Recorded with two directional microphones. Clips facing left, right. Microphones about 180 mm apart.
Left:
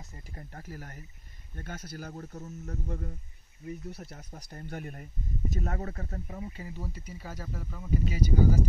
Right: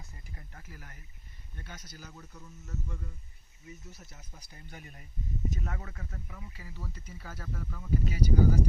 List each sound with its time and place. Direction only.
0.3 s speech: 40° left (ahead or behind)
1.6 s speech: 55° left (ahead or behind)
5.6 s speech: 40° left (ahead or behind)
6.6 s speech: 20° left (ahead or behind)